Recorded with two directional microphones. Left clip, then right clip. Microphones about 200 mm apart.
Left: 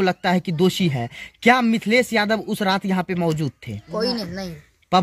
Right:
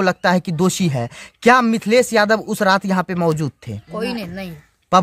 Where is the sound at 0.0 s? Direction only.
30° right (ahead or behind).